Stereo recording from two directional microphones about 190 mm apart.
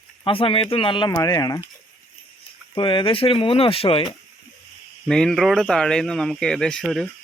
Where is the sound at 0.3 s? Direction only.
30° left (ahead or behind).